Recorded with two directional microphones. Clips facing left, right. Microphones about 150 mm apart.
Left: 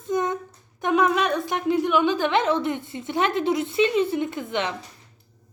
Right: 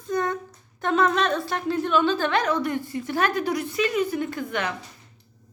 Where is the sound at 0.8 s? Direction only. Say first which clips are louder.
Left 1 dB; 10° left (ahead or behind).